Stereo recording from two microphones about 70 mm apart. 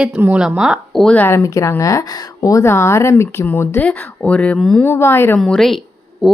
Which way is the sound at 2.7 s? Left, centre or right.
Left.